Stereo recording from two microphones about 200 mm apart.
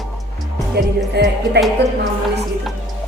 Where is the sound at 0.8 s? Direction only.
55° right (ahead or behind).